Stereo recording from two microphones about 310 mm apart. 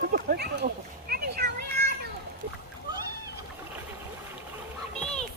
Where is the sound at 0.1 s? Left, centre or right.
Right.